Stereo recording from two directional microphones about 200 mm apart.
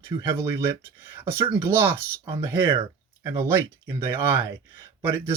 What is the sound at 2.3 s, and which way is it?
Speech, 25° right (ahead or behind).